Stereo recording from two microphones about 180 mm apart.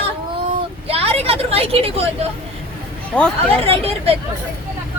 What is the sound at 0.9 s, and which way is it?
Speech, 35° right (ahead or behind).